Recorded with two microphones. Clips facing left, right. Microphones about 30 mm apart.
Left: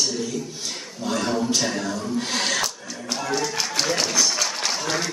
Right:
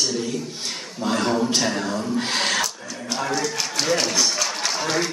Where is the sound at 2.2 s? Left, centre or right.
Centre.